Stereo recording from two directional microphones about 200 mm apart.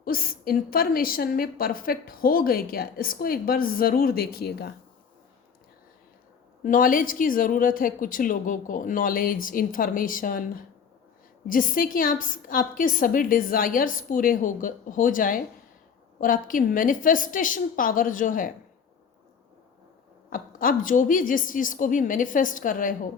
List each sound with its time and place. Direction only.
0.0 s a woman's voice: 45° left (ahead or behind)
6.6 s a woman's voice: 45° left (ahead or behind)
20.3 s a woman's voice: 45° left (ahead or behind)